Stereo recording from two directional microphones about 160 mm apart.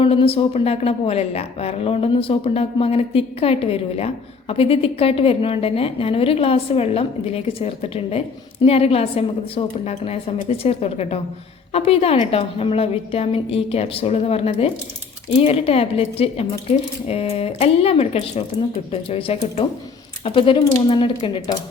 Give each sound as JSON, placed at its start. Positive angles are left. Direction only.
{"t": 0.0, "sound": "a woman's voice", "side_deg": 35}